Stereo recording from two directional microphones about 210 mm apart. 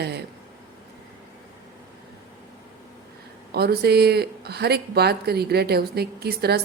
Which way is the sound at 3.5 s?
50° right (ahead or behind).